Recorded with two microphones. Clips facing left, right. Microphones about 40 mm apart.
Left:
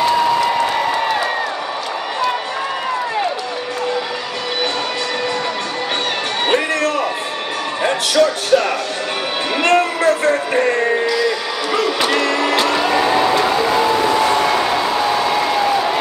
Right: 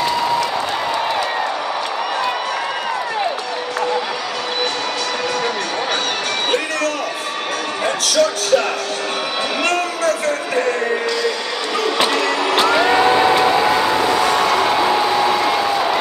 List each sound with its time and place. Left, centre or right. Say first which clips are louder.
7.8 s speech: left 2 dB; left
9.6 s music: left 6 dB; left
12.4 s music: right 1 dB; centre
15.3 s a sound: even; centre